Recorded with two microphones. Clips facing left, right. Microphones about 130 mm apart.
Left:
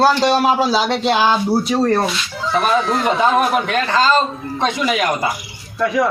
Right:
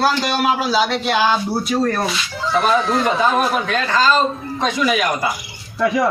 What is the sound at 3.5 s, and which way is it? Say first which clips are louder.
Speech: left 2 dB; 20° left (ahead or behind).